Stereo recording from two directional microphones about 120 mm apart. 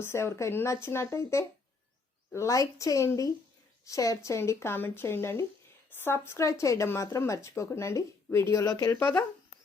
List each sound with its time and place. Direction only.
0.0 s speech: 20° left (ahead or behind)